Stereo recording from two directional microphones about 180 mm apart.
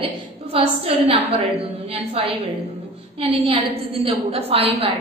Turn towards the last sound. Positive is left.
turn(degrees=-30)  # may be behind; listen again after turning